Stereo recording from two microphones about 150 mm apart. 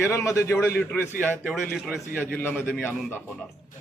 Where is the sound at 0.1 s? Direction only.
20° left (ahead or behind).